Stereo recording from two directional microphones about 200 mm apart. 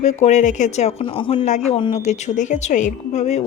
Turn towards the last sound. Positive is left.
turn(degrees=35)  # may be behind; listen again after turning